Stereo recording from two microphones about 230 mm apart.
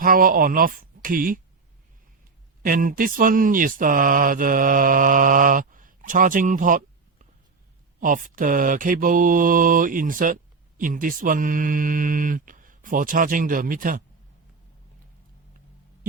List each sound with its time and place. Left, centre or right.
0.0 s speech: right
2.6 s speech: right